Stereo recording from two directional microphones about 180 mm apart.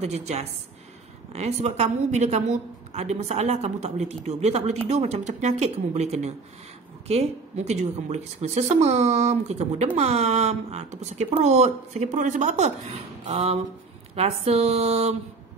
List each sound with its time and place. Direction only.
0.0 s a woman's voice: 35° right (ahead or behind)